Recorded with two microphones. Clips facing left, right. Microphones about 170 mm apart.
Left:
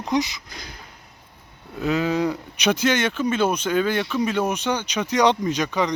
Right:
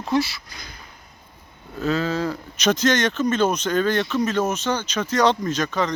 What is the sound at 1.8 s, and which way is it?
Speech, 15° left (ahead or behind).